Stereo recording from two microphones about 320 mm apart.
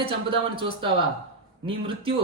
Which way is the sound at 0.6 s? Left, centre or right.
Centre.